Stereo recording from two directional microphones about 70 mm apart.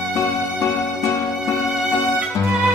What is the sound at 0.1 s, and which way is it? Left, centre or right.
Music, left.